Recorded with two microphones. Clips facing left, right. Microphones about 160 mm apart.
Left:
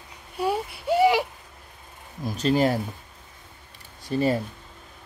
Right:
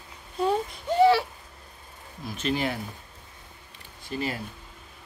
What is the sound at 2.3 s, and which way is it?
Speech, 40° left (ahead or behind).